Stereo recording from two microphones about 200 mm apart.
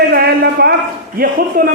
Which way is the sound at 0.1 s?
55° right (ahead or behind).